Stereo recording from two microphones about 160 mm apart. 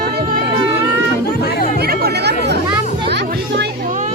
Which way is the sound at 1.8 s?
75° right (ahead or behind).